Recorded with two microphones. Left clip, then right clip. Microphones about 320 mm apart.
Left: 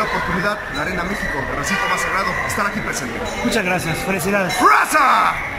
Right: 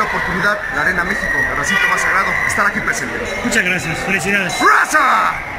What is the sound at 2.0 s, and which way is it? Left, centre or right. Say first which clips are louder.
Speech: right 5 dB; centre.